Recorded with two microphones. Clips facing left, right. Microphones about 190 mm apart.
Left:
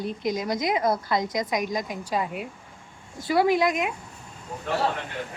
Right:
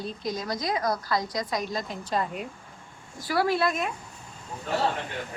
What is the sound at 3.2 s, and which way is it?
Speech, 20° left (ahead or behind).